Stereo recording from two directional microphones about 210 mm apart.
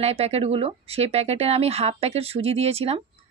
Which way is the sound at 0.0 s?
30° right (ahead or behind).